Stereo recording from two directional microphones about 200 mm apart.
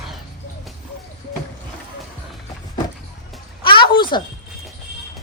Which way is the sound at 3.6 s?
25° left (ahead or behind).